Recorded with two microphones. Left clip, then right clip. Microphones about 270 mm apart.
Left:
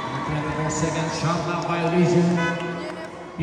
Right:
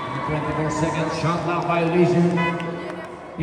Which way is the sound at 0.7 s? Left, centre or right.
Right.